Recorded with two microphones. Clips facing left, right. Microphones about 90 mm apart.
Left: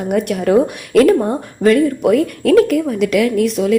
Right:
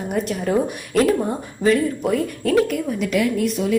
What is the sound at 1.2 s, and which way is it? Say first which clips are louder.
Speech: left 6 dB; 55° left (ahead or behind).